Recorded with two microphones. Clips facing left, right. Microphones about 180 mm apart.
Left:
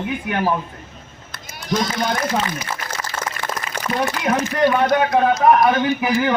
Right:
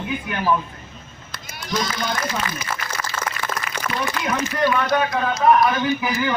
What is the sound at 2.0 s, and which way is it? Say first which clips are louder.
Speech: left 4 dB; 50° left (ahead or behind).